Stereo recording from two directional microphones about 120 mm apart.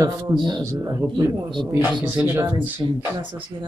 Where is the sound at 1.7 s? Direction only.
15° right (ahead or behind).